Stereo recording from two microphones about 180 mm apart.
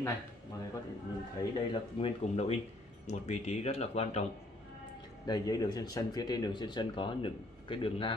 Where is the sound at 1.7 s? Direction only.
30° left (ahead or behind).